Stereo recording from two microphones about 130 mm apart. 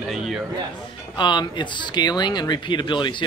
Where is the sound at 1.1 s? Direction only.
35° left (ahead or behind).